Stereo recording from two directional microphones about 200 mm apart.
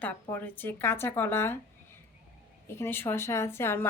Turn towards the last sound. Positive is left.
turn(degrees=10)  # may be behind; listen again after turning